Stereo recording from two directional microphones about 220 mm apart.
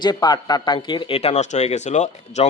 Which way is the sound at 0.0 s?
20° left (ahead or behind).